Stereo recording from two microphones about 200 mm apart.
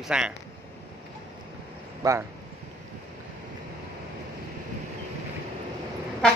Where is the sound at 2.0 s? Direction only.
15° right (ahead or behind).